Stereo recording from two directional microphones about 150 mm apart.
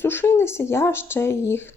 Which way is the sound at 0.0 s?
15° left (ahead or behind).